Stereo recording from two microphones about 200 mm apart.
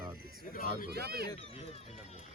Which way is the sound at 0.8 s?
50° right (ahead or behind).